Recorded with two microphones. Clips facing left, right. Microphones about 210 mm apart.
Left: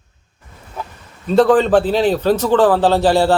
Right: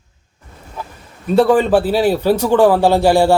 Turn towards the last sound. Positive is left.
turn(degrees=-15)  # may be behind; listen again after turning